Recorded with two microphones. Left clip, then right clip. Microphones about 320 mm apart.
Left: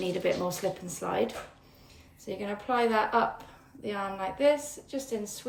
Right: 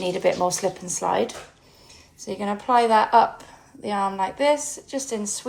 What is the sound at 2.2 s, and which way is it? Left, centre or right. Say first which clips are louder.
Speech: right 8 dB; centre.